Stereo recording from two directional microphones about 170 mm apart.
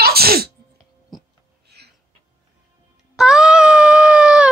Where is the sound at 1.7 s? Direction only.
75° right (ahead or behind).